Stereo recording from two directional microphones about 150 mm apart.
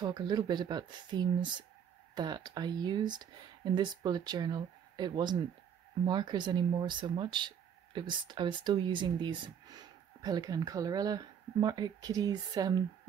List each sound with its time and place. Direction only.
0.0 s speech: 30° right (ahead or behind)